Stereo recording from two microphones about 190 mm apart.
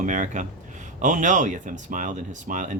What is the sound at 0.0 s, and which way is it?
Speech, 40° right (ahead or behind).